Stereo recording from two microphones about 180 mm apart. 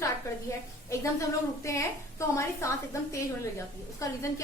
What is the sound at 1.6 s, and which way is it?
A woman's voice, 15° left (ahead or behind).